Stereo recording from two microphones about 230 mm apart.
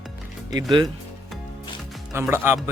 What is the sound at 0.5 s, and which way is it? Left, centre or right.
Speech, centre.